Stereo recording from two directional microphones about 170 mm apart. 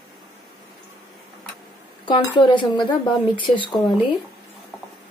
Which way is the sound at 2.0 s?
30° left (ahead or behind).